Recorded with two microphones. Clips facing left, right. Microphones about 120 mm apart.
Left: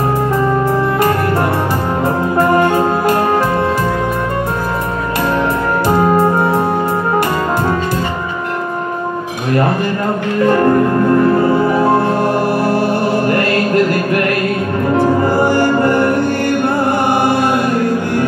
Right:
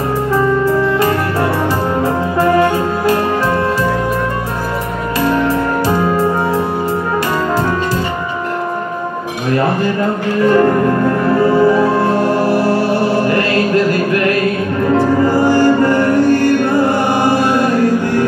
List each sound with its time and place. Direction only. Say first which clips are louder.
5.9 s music: left 5 dB; 55° left (ahead or behind)
12.6 s music: right 1 dB; 50° left (ahead or behind)
15.4 s music: right 2 dB; 55° left (ahead or behind)